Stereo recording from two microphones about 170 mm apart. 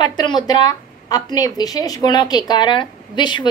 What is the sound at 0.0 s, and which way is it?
A woman's voice, 25° left (ahead or behind).